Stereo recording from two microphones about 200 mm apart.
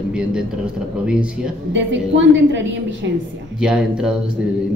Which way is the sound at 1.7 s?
65° right (ahead or behind).